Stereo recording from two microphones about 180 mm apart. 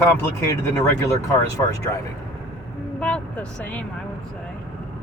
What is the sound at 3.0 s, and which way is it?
Speech, 5° left (ahead or behind).